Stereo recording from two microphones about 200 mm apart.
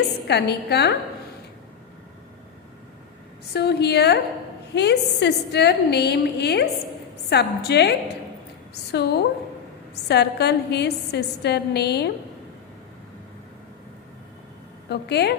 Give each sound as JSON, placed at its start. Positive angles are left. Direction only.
{"t": 0.3, "sound": "a woman's voice", "side_deg": 55}
{"t": 3.5, "sound": "a woman's voice", "side_deg": 55}
{"t": 14.8, "sound": "a woman's voice", "side_deg": 55}